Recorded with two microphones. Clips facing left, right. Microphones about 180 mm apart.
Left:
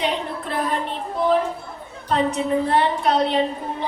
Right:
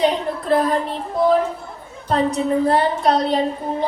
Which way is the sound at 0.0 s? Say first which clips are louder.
Right 5 dB; 35° right (ahead or behind).